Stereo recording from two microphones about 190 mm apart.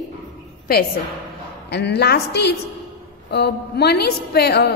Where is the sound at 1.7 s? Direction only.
60° left (ahead or behind).